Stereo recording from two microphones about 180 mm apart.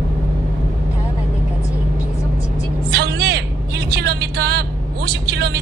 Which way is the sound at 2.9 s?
65° right (ahead or behind).